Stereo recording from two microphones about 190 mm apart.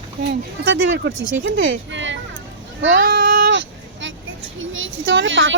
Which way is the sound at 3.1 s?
50° right (ahead or behind).